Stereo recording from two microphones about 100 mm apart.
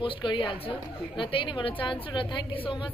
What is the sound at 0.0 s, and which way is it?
A woman's voice, 55° left (ahead or behind).